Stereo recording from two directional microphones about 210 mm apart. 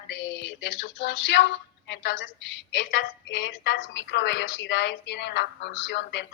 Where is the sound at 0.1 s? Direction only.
55° left (ahead or behind).